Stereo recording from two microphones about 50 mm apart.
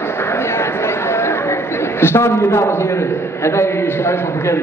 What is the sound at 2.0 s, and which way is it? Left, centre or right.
Speech, left.